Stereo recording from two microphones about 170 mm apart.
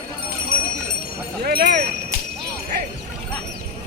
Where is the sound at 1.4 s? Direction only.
70° right (ahead or behind).